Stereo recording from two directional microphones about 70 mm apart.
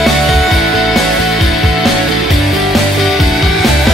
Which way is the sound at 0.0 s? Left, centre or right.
Centre.